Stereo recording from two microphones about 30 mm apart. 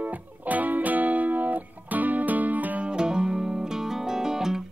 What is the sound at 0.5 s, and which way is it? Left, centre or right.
Music, right.